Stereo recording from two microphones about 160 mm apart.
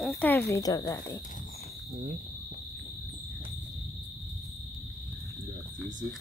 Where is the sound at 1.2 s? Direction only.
55° left (ahead or behind).